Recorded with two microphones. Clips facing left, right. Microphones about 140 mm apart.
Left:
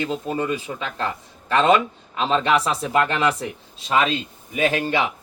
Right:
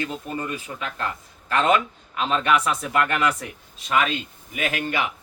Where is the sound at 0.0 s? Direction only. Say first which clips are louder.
Left 5 dB; 25° left (ahead or behind).